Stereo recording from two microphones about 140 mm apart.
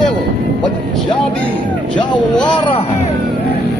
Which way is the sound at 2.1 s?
35° left (ahead or behind).